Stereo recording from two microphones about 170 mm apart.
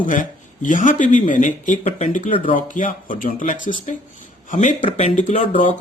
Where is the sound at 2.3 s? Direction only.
30° left (ahead or behind).